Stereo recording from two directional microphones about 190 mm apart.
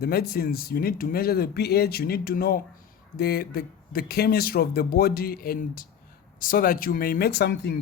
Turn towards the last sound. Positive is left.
turn(degrees=55)  # may be behind; listen again after turning